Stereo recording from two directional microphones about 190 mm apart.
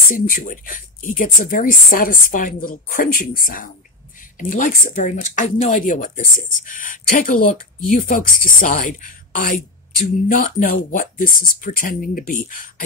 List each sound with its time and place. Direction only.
0.1 s speech: 45° left (ahead or behind)